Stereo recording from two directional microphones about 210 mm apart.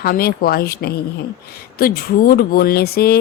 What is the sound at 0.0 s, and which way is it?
A woman's voice, 45° left (ahead or behind).